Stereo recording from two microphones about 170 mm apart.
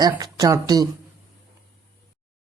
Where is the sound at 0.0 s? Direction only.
20° right (ahead or behind).